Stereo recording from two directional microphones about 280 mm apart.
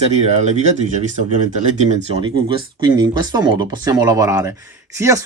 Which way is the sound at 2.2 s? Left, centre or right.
Centre.